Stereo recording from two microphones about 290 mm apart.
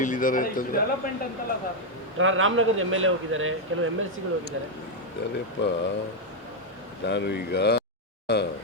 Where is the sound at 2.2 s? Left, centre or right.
Right.